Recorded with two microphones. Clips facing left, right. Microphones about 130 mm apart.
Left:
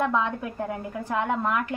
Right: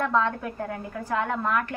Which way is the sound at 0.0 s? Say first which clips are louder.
Right 1 dB; 15° left (ahead or behind).